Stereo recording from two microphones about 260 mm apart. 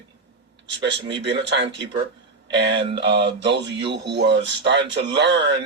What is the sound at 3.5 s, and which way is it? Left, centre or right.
Speech, right.